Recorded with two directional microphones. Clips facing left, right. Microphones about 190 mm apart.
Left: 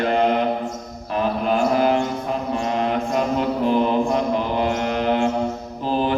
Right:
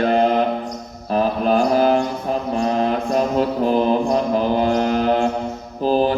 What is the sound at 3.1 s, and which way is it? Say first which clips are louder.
Mantra: right 2 dB; 35° right (ahead or behind).